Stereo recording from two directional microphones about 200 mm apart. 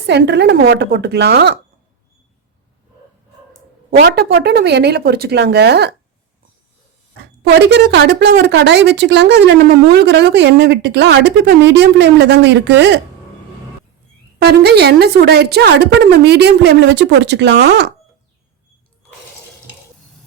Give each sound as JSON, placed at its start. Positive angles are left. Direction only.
{"t": 0.1, "sound": "speech", "side_deg": -55}
{"t": 3.9, "sound": "speech", "side_deg": -55}
{"t": 7.1, "sound": "speech", "side_deg": -55}
{"t": 14.3, "sound": "speech", "side_deg": -55}